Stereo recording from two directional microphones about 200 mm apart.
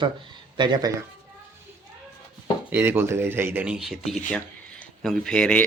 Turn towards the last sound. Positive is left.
turn(degrees=5)  # may be behind; listen again after turning